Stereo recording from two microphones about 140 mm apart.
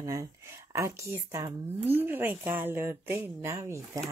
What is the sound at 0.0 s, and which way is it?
Speech, 25° right (ahead or behind).